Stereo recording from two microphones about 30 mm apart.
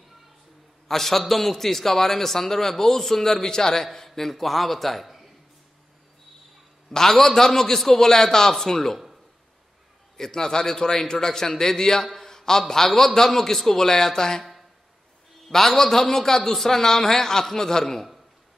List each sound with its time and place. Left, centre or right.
0.8 s a man's voice: centre
6.9 s a man's voice: centre
10.1 s a man's voice: centre
15.5 s a man's voice: centre